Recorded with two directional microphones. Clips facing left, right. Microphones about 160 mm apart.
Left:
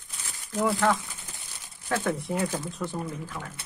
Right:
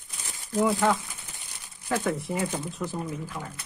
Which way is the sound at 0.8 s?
10° right (ahead or behind).